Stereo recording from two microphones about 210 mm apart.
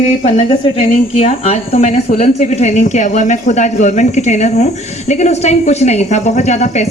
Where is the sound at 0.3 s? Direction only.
30° left (ahead or behind).